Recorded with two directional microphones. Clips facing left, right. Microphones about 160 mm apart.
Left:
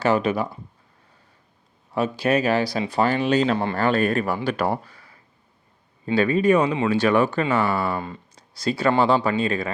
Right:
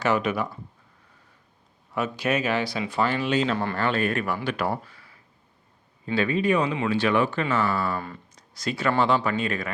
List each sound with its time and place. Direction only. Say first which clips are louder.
0.0 s speech: left 3 dB; 30° left (ahead or behind)
2.0 s speech: left 4 dB; 35° left (ahead or behind)
6.1 s speech: left 5 dB; 40° left (ahead or behind)
7.4 s speech: left 3 dB; 20° left (ahead or behind)